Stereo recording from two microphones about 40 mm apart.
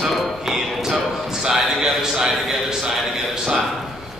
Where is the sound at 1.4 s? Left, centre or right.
Centre.